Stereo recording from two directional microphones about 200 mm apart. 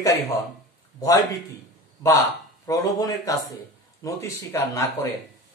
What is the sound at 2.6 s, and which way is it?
Speech, 15° left (ahead or behind).